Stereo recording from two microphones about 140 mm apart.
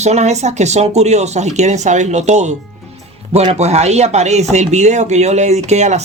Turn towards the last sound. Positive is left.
turn(degrees=-55)  # may be behind; listen again after turning